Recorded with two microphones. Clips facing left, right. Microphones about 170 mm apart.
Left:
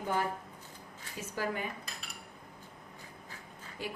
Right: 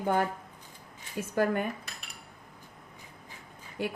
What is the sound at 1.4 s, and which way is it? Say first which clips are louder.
Speech: right 8 dB; 55° right (ahead or behind).